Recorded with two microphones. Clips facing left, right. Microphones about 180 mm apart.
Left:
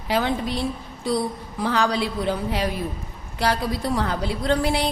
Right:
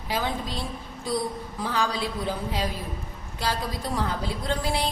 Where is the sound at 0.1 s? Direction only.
70° left (ahead or behind).